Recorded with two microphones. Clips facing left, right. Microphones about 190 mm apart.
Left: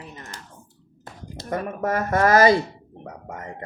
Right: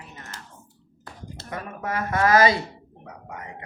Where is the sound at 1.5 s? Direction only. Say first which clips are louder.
Left 6 dB; 45° left (ahead or behind).